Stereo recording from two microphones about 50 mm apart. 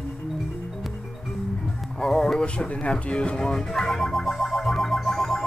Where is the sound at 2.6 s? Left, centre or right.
Left.